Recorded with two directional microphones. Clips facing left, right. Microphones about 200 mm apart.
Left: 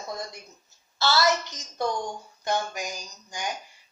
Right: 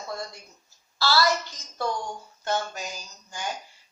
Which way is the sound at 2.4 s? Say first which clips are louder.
Left 1 dB; 15° left (ahead or behind).